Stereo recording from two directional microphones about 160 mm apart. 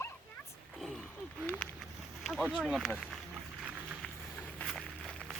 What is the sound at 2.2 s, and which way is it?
Speech, centre (ahead or behind).